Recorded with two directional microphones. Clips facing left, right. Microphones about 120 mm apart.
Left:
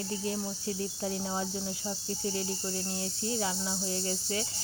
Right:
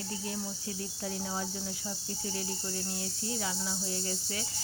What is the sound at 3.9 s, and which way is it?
Cricket, 30° left (ahead or behind).